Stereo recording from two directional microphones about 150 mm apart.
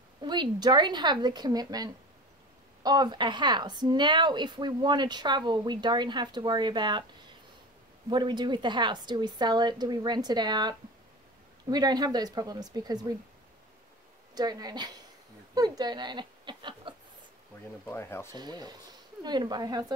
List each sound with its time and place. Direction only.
0.2 s a woman's voice: 30° right (ahead or behind)
8.1 s a woman's voice: 30° right (ahead or behind)
14.3 s a woman's voice: 25° right (ahead or behind)
17.8 s speech: 15° left (ahead or behind)
18.3 s a woman's voice: 30° right (ahead or behind)